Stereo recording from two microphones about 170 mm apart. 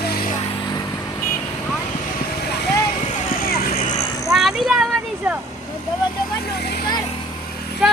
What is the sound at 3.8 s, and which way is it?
Vehicle, 40° left (ahead or behind).